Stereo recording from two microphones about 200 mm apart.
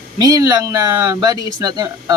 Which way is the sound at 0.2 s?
20° right (ahead or behind).